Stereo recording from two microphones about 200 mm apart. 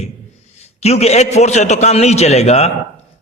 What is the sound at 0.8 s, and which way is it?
A man's voice, 35° left (ahead or behind).